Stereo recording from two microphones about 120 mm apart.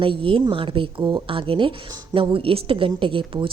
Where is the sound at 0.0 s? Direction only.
45° right (ahead or behind).